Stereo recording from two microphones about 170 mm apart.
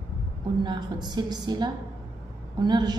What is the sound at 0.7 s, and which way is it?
A woman's voice, 25° right (ahead or behind).